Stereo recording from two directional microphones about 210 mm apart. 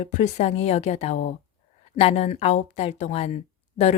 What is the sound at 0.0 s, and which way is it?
A woman's voice, 35° left (ahead or behind).